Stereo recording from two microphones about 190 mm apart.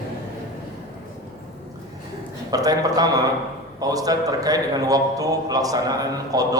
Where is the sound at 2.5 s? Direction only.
20° right (ahead or behind).